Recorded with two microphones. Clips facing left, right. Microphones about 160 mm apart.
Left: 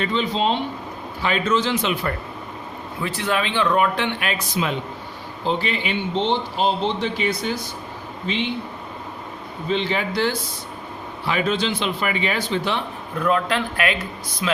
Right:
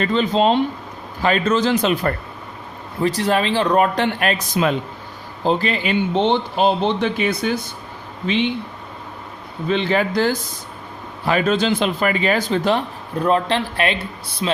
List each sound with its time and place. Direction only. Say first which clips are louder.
0.0 s speech: right 5 dB; 45° right (ahead or behind)
6.6 s speech: right 5 dB; 60° right (ahead or behind)
9.6 s speech: right 4 dB; 55° right (ahead or behind); by 14.6 s 30° right (ahead or behind)